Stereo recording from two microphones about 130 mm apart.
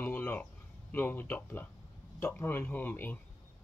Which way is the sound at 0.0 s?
15° left (ahead or behind).